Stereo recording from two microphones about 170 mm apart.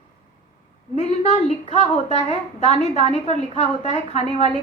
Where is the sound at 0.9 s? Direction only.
35° left (ahead or behind).